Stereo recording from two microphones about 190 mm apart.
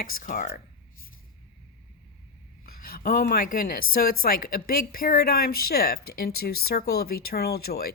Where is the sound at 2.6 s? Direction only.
50° left (ahead or behind).